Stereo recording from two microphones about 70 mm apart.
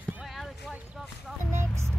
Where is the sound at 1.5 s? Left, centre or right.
Right.